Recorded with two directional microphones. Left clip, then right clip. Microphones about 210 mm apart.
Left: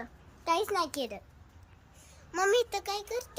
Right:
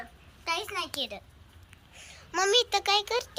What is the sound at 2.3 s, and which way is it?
Speech, 10° left (ahead or behind).